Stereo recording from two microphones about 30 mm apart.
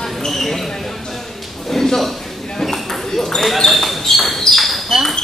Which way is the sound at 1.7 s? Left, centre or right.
Centre.